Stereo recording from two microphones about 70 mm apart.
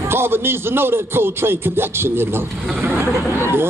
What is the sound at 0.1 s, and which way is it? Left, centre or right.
A man's voice, right.